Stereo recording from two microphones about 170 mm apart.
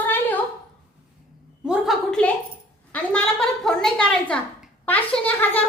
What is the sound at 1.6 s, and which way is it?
A woman's voice, 5° right (ahead or behind).